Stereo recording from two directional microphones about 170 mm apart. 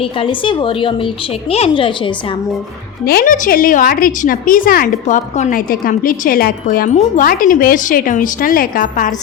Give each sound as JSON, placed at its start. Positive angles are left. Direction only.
{"t": 0.0, "sound": "a woman's voice", "side_deg": 30}
{"t": 3.0, "sound": "a woman's voice", "side_deg": 65}